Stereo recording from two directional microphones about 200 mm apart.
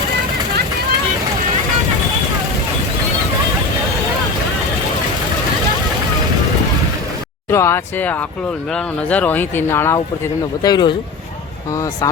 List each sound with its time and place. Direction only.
7.5 s speech: 15° left (ahead or behind)